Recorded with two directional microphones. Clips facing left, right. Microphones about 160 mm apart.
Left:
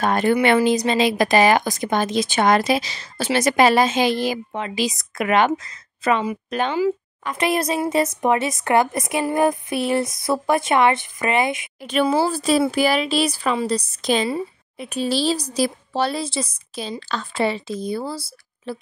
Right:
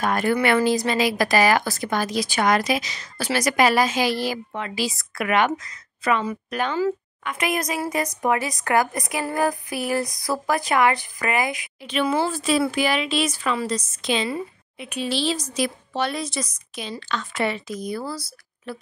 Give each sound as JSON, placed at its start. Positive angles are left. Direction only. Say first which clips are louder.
{"t": 0.0, "sound": "speech", "louder": "left 3 dB", "side_deg": 25}
{"t": 11.8, "sound": "a woman's voice", "louder": "left 3 dB", "side_deg": 45}